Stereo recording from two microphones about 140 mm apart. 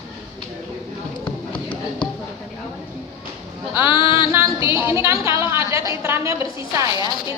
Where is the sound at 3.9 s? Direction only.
40° left (ahead or behind).